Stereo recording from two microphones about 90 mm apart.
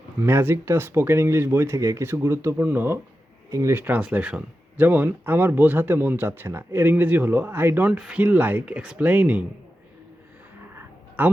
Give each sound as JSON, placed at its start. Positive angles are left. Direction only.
{"t": 0.2, "sound": "speech", "side_deg": -25}
{"t": 7.9, "sound": "speech", "side_deg": -10}
{"t": 11.2, "sound": "speech", "side_deg": -20}